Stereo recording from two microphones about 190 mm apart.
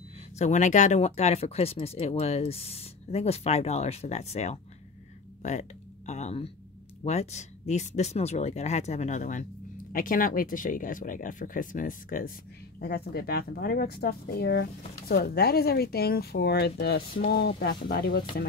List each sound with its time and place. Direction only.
0.4 s speech: 40° left (ahead or behind); by 18.2 s 55° left (ahead or behind)